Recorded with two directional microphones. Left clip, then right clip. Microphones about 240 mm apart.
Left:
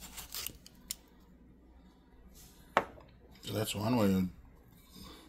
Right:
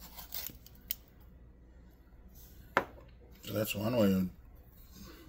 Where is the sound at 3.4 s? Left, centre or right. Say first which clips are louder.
Even; left.